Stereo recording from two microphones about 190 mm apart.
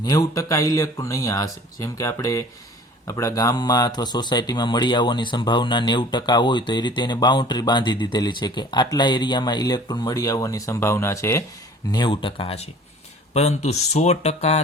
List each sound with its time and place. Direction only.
0.0 s speech: 20° left (ahead or behind); by 14.6 s 35° left (ahead or behind)